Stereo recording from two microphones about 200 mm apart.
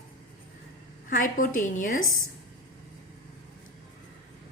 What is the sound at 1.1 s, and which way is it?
Speech, 40° left (ahead or behind).